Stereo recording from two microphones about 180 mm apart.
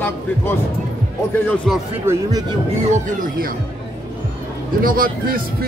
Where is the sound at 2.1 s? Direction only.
10° right (ahead or behind).